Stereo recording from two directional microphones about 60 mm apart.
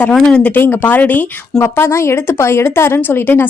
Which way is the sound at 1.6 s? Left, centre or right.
Left.